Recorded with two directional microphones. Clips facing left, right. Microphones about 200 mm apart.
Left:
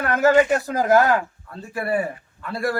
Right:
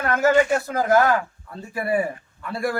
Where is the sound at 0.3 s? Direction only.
15° left (ahead or behind).